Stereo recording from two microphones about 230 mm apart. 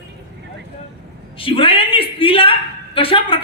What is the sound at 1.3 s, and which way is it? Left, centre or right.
A man's voice, left.